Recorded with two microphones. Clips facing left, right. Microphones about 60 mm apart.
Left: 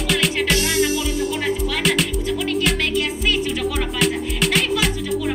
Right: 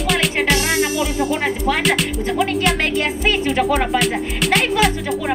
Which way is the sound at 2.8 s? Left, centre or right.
Right.